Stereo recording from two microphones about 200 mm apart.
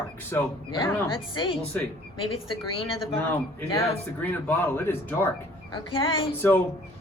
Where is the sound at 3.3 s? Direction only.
10° left (ahead or behind).